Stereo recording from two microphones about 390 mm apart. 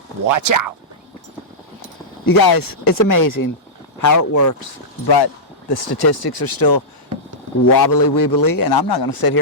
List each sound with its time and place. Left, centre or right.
0.3 s speech: right
2.2 s a man's voice: left
5.6 s a man's voice: left